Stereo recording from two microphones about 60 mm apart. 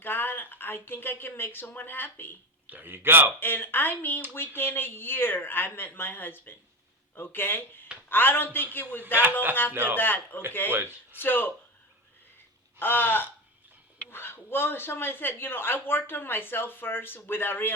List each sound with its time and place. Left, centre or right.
0.0 s a woman's voice: left
2.6 s a man's voice: right
3.4 s speech: left
10.7 s a man's voice: right
11.2 s speech: left
12.8 s speech: left